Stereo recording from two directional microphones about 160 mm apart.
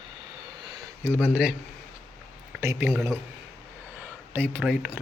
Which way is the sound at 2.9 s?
Centre (ahead or behind).